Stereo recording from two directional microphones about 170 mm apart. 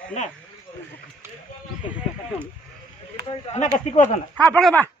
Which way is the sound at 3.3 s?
40° left (ahead or behind).